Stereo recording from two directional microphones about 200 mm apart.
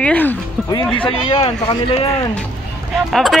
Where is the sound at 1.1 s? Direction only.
25° left (ahead or behind).